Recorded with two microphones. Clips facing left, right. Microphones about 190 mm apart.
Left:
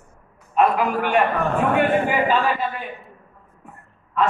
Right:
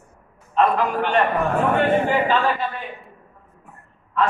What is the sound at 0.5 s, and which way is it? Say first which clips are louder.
A man's voice: even; 10° left (ahead or behind).